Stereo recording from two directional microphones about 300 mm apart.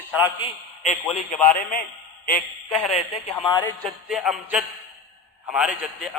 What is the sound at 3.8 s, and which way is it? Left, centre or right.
A man's voice, centre.